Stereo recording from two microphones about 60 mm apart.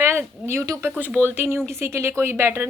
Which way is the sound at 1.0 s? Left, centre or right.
Right.